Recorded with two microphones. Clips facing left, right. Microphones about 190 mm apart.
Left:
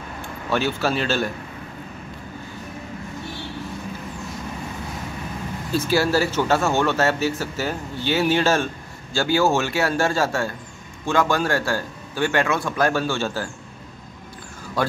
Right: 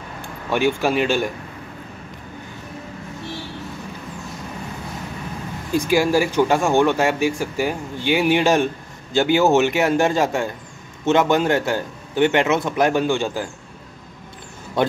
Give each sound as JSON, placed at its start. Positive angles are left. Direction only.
{"t": 0.5, "sound": "speech", "side_deg": -15}
{"t": 5.7, "sound": "a man's voice", "side_deg": -15}
{"t": 14.8, "sound": "a man's voice", "side_deg": -20}